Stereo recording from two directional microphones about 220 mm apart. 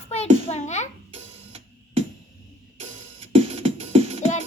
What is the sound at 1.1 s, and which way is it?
Music, 30° right (ahead or behind).